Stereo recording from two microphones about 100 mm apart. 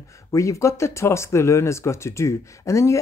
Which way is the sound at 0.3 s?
30° left (ahead or behind).